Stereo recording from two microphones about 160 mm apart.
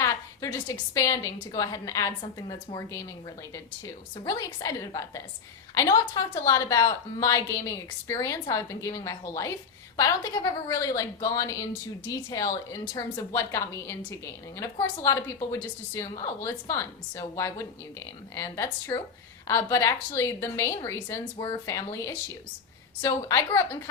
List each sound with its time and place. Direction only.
0.0 s a woman's voice: 20° left (ahead or behind)